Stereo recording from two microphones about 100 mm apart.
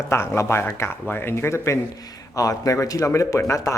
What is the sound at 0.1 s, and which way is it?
A man's voice, 25° left (ahead or behind).